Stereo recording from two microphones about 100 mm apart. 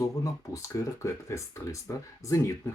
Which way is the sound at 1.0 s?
30° left (ahead or behind).